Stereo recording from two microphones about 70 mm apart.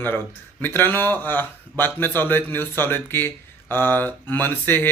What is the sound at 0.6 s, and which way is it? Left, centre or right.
A man's voice, left.